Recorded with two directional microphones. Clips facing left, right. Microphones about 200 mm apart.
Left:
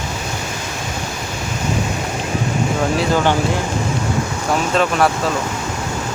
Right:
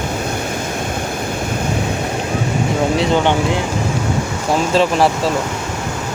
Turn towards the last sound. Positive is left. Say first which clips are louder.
# right 2 dB
turn(degrees=-30)  # may be behind; listen again after turning